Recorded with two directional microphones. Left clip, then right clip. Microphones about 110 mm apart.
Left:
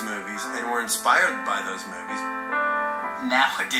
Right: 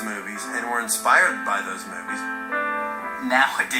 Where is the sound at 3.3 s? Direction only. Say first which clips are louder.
Right 2 dB; 5° right (ahead or behind).